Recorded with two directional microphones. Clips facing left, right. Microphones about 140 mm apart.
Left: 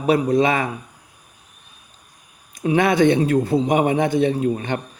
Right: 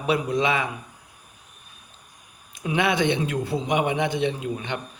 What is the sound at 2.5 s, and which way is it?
A man's voice, 40° left (ahead or behind).